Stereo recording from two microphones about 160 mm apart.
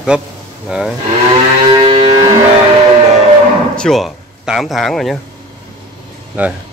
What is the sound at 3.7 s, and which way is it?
Speech, 5° left (ahead or behind).